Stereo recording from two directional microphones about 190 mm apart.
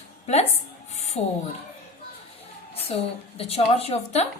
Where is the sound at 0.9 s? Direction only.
35° left (ahead or behind).